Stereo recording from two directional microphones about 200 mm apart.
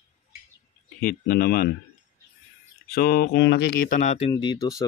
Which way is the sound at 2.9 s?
50° left (ahead or behind).